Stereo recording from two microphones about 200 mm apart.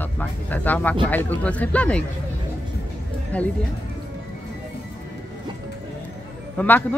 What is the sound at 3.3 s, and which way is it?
Speech, 5° left (ahead or behind).